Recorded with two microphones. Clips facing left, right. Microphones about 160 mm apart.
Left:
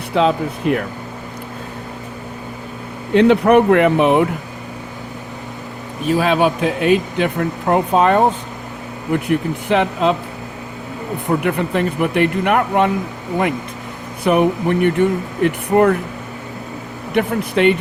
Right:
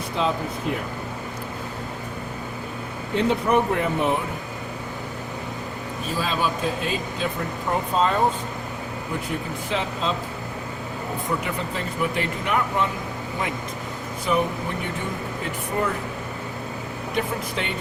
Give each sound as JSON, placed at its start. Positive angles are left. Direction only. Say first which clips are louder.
{"t": 0.1, "sound": "speech", "louder": "left 9 dB", "side_deg": 70}
{"t": 3.2, "sound": "speech", "louder": "left 10 dB", "side_deg": 70}
{"t": 6.1, "sound": "speech", "louder": "left 11 dB", "side_deg": 70}
{"t": 9.6, "sound": "speech", "louder": "left 10 dB", "side_deg": 65}
{"t": 11.3, "sound": "speech", "louder": "left 11 dB", "side_deg": 65}
{"t": 14.3, "sound": "speech", "louder": "left 9 dB", "side_deg": 65}
{"t": 17.2, "sound": "speech", "louder": "left 11 dB", "side_deg": 65}